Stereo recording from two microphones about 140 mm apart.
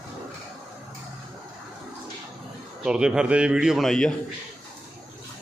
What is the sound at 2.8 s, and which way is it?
Speech, 5° right (ahead or behind).